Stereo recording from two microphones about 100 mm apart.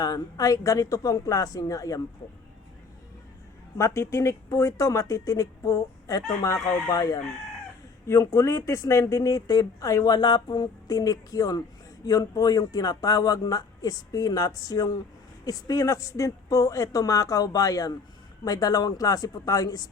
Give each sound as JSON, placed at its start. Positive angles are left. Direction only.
{"t": 0.0, "sound": "speech", "side_deg": 35}
{"t": 3.8, "sound": "speech", "side_deg": 30}